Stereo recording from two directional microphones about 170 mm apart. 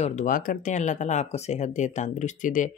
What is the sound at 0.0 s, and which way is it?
Speech, 45° left (ahead or behind).